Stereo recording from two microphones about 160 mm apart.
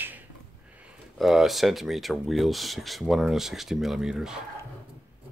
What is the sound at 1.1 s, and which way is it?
Speech, centre (ahead or behind).